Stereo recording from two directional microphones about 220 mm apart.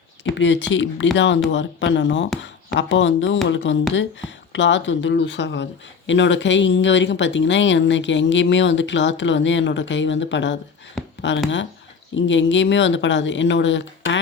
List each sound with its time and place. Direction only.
0.3 s speech: 55° left (ahead or behind)